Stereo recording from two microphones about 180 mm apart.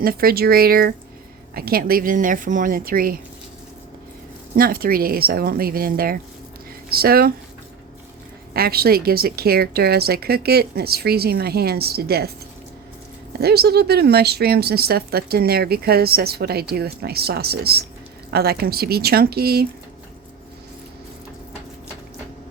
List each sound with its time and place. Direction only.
0.0 s a woman's voice: 55° right (ahead or behind)
4.5 s a woman's voice: 55° right (ahead or behind)
8.5 s a woman's voice: 55° right (ahead or behind)
13.4 s a woman's voice: 60° right (ahead or behind)